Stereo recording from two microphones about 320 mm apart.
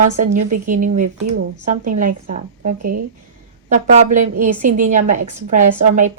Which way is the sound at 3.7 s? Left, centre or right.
Right.